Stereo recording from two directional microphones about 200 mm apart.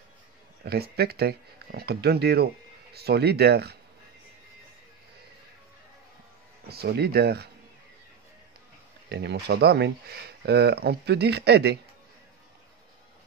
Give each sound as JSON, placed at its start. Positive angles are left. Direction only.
{"t": 0.7, "sound": "speech", "side_deg": -55}
{"t": 6.7, "sound": "speech", "side_deg": -50}
{"t": 9.1, "sound": "speech", "side_deg": -60}